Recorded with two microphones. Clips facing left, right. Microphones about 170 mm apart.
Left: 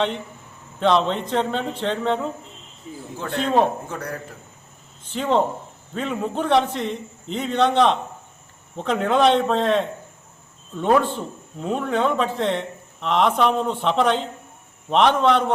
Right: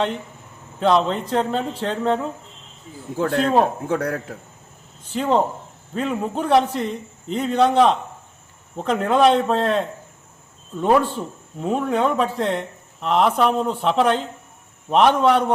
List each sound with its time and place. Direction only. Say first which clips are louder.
0.8 s speech: right 1 dB; 5° right (ahead or behind)
3.2 s a man's voice: right 2 dB; 50° right (ahead or behind)
5.1 s a man's voice: right 1 dB; 5° right (ahead or behind)